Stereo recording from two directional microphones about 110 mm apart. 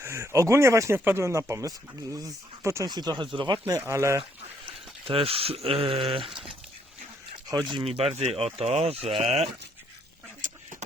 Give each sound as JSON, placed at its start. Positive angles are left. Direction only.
{"t": 0.0, "sound": "speech", "side_deg": -25}
{"t": 2.9, "sound": "speech", "side_deg": -40}
{"t": 3.7, "sound": "speech", "side_deg": -30}
{"t": 4.2, "sound": "speech", "side_deg": -55}
{"t": 7.9, "sound": "speech", "side_deg": -65}